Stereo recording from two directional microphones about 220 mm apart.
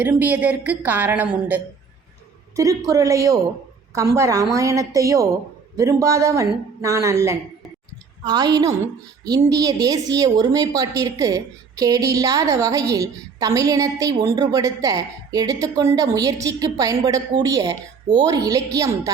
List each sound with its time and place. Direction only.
0.0 s a woman's voice: 5° right (ahead or behind)